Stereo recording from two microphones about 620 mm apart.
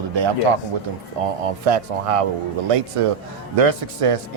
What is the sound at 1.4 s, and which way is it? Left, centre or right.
Speech, right.